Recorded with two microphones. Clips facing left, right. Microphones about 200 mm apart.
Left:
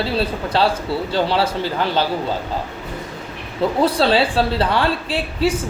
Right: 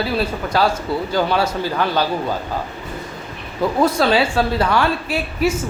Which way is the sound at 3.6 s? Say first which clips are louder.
Even; 30° left (ahead or behind).